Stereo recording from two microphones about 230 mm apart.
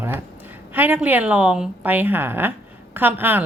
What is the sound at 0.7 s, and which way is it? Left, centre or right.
A woman's voice, centre.